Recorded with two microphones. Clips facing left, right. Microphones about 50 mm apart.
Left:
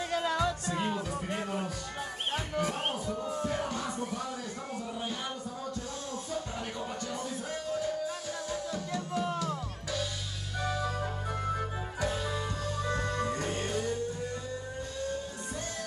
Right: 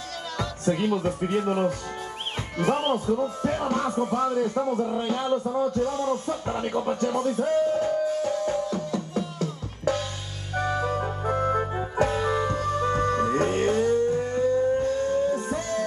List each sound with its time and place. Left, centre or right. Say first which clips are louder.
1.0 s speech: right 10 dB; right
8.2 s music: right 11 dB; right